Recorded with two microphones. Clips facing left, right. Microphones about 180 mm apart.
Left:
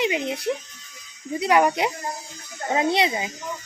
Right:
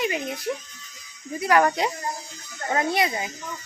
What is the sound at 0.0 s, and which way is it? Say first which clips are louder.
A woman's voice: left 3 dB; 20° left (ahead or behind).